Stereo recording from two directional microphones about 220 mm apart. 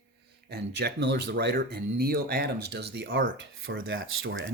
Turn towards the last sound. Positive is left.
turn(degrees=-60)  # may be behind; listen again after turning